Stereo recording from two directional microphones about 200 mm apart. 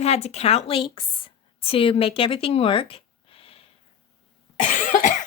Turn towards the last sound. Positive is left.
turn(degrees=40)  # may be behind; listen again after turning